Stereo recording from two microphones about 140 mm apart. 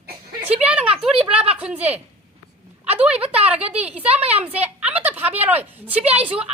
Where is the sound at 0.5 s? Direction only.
10° right (ahead or behind).